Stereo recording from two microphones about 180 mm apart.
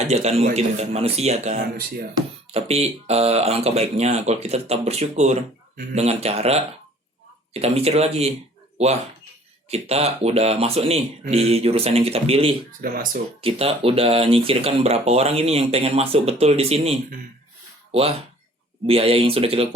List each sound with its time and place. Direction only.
0.1 s speech: 35° right (ahead or behind)
9.6 s speech: 35° right (ahead or behind)
12.8 s speech: 50° right (ahead or behind)
13.4 s speech: 30° right (ahead or behind)
18.9 s speech: 30° right (ahead or behind)